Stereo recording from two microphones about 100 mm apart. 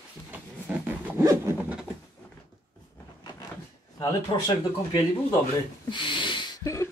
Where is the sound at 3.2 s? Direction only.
50° left (ahead or behind).